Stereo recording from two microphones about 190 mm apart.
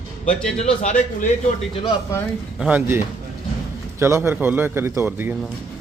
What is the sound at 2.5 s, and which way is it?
A man's voice, 5° right (ahead or behind).